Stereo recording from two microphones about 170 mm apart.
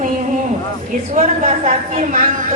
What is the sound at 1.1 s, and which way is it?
A woman's voice, 45° right (ahead or behind).